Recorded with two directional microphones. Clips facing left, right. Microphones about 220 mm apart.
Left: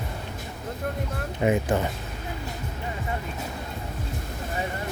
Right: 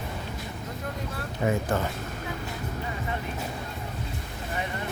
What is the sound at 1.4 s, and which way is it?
Speech, 15° left (ahead or behind).